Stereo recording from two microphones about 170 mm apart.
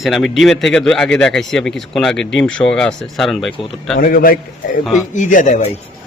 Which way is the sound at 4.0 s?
60° left (ahead or behind).